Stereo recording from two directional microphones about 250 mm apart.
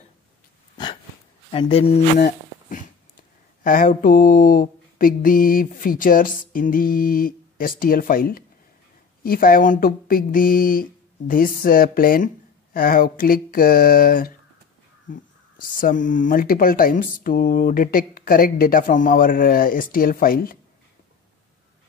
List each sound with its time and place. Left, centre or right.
1.5 s speech: left
2.1 s a sound: left
3.6 s speech: left